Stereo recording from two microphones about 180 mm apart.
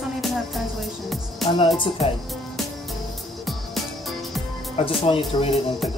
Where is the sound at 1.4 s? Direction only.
Centre (ahead or behind).